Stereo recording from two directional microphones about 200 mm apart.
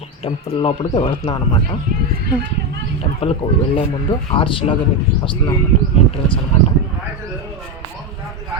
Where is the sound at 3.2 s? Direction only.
30° left (ahead or behind).